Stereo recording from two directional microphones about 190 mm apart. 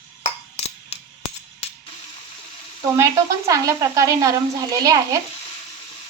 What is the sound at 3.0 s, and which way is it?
Speech, 15° right (ahead or behind).